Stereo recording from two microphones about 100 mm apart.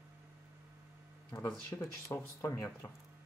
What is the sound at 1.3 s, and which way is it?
Speech, 30° left (ahead or behind).